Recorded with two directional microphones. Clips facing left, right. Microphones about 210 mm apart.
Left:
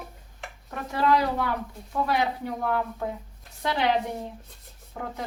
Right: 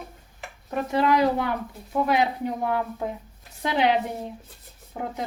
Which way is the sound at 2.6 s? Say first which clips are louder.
Left 1 dB; 20° right (ahead or behind).